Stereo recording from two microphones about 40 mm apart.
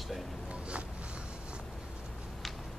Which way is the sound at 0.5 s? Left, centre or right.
Right.